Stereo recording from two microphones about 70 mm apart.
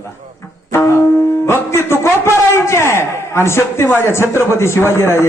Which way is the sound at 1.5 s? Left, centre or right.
Left.